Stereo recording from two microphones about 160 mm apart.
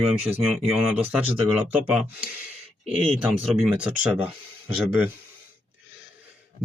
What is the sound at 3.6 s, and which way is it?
Speech, 10° right (ahead or behind).